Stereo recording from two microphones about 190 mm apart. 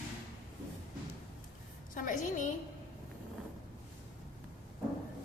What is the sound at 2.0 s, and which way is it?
Speech, 45° left (ahead or behind).